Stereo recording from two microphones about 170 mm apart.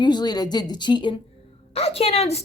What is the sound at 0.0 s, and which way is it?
A woman's voice, 25° left (ahead or behind).